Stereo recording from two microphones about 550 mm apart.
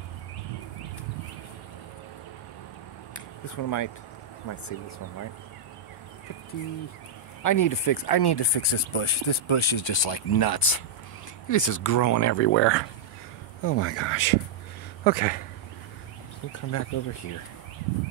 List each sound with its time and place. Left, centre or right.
3.4 s speech: left
7.4 s speech: left; by 15.4 s centre
16.5 s speech: left